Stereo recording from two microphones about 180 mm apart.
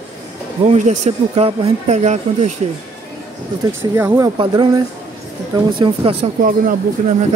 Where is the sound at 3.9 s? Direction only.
15° right (ahead or behind).